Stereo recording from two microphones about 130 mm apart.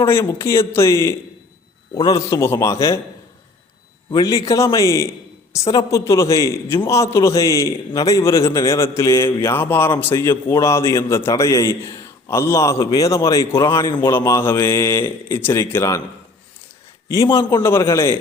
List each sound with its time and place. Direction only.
0.0 s a man's voice: 20° left (ahead or behind)
4.1 s a man's voice: 25° left (ahead or behind)
17.3 s a man's voice: 25° left (ahead or behind)